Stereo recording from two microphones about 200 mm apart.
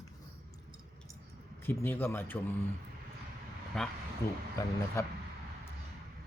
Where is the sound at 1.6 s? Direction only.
10° left (ahead or behind).